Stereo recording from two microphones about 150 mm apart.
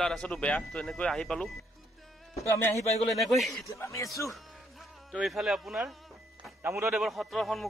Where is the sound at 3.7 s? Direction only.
20° left (ahead or behind).